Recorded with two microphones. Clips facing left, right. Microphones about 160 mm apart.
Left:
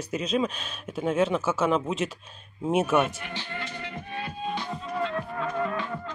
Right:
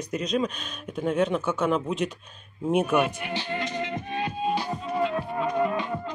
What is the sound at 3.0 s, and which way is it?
Music, 15° right (ahead or behind).